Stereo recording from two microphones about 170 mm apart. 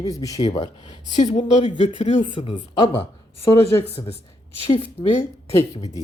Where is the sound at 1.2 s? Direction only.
40° left (ahead or behind).